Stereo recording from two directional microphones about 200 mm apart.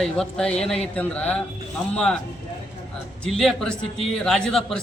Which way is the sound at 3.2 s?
5° left (ahead or behind).